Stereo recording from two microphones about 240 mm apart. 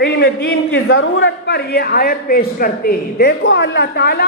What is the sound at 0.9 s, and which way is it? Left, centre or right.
A man's voice, left.